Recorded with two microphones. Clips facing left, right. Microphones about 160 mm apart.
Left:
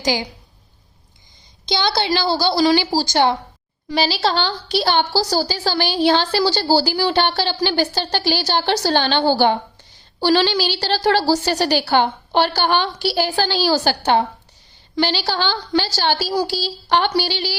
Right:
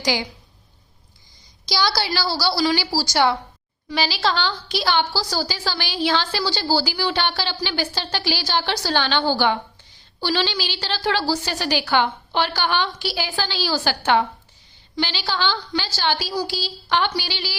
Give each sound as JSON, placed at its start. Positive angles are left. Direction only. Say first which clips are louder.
{"t": 1.6, "sound": "a woman's voice", "louder": "left 3 dB", "side_deg": 25}
{"t": 6.7, "sound": "a woman's voice", "louder": "left 3 dB", "side_deg": 30}
{"t": 6.9, "sound": "a woman's voice", "louder": "left 5 dB", "side_deg": 45}